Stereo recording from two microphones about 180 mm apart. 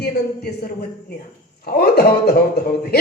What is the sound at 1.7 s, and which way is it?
Speech, 60° left (ahead or behind).